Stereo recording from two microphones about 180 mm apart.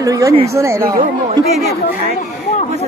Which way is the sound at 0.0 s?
20° right (ahead or behind).